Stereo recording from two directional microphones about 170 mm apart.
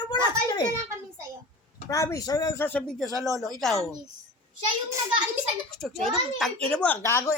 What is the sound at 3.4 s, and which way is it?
Speech, centre (ahead or behind).